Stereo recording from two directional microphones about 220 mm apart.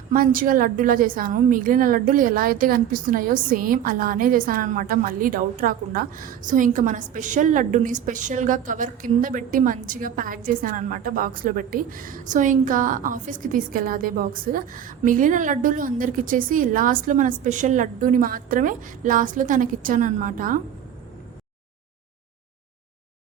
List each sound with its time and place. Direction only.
0.1 s a woman's voice: 40° right (ahead or behind)